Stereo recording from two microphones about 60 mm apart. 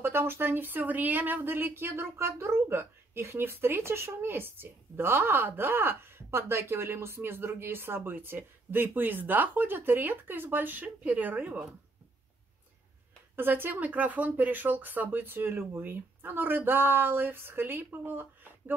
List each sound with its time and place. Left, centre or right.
0.0 s speech: right
13.4 s speech: right